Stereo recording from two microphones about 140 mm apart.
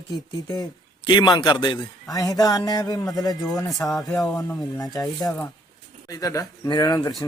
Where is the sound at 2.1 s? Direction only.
25° left (ahead or behind).